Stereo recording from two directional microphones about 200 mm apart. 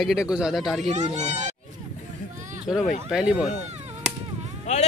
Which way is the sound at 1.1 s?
35° right (ahead or behind).